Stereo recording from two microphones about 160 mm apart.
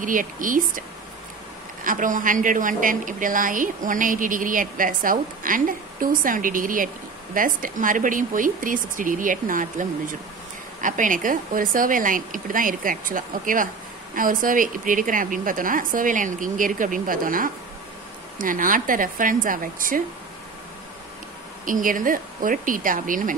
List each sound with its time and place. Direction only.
0.0 s a woman's voice: 55° right (ahead or behind)
1.9 s a woman's voice: 55° right (ahead or behind)
21.6 s a woman's voice: 55° right (ahead or behind)